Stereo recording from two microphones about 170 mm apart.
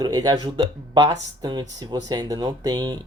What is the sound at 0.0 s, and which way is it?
Speech, 25° right (ahead or behind).